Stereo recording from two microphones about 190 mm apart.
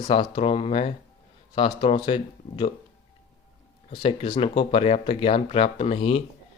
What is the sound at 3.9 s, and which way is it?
Speech, 30° left (ahead or behind).